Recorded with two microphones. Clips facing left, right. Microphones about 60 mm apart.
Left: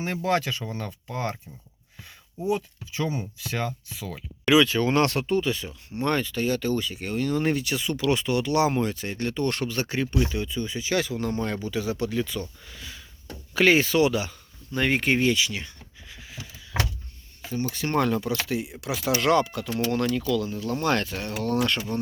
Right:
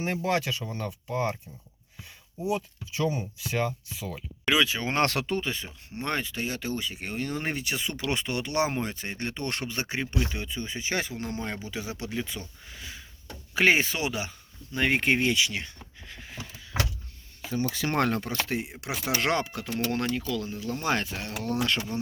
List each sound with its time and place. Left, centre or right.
0.0 s speech: centre
2.4 s speech: centre
4.4 s speech: centre
5.0 s speech: right
5.4 s speech: right
5.6 s speech: centre
11.3 s speech: centre; by 15.7 s right
17.7 s speech: right
18.3 s speech: right; by 21.6 s centre